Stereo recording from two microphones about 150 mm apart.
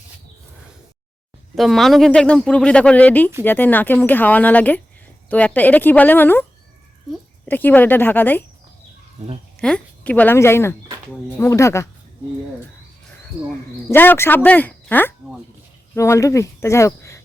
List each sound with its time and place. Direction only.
1.5 s speech: centre (ahead or behind)
7.4 s speech: 10° left (ahead or behind)
9.6 s a woman's voice: 5° left (ahead or behind)
13.9 s speech: 15° left (ahead or behind)